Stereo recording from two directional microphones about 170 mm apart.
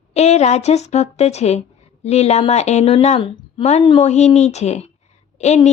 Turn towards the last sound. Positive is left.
turn(degrees=40)  # may be behind; listen again after turning